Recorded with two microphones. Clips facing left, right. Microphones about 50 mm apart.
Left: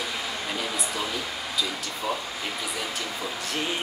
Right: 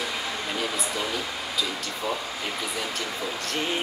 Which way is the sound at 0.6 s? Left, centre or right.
Centre.